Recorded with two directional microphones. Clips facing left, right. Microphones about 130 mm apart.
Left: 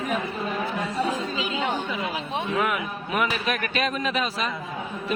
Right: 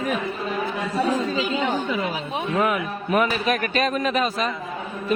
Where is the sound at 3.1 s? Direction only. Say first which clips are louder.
Right 5 dB; 40° right (ahead or behind).